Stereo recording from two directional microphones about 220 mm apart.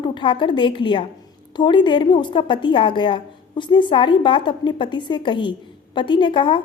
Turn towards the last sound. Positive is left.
turn(degrees=20)  # may be behind; listen again after turning